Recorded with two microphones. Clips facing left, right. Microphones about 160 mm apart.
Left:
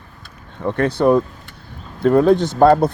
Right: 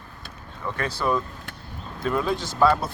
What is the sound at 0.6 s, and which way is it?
Speech, 60° left (ahead or behind).